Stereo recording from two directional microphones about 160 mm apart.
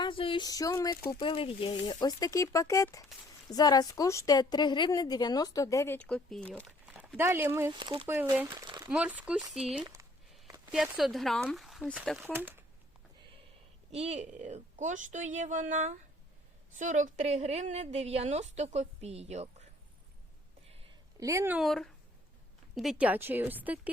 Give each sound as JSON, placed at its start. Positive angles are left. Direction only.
{"t": 0.0, "sound": "a woman's voice", "side_deg": 30}
{"t": 1.2, "sound": "a woman's voice", "side_deg": 35}
{"t": 7.2, "sound": "speech", "side_deg": -15}
{"t": 7.7, "sound": "speech", "side_deg": -30}
{"t": 8.0, "sound": "speech", "side_deg": -15}
{"t": 8.9, "sound": "speech", "side_deg": -5}
{"t": 9.8, "sound": "speech", "side_deg": -25}
{"t": 10.7, "sound": "speech", "side_deg": 0}
{"t": 13.9, "sound": "a woman's voice", "side_deg": -40}
{"t": 21.2, "sound": "speech", "side_deg": -20}
{"t": 21.6, "sound": "speech", "side_deg": 0}